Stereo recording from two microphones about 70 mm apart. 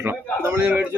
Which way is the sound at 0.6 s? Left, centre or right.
Right.